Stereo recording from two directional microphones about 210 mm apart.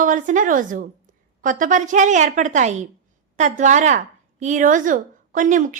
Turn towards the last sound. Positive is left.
turn(degrees=-40)  # may be behind; listen again after turning